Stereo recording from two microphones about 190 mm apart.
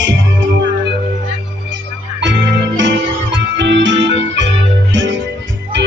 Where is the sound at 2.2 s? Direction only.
70° right (ahead or behind).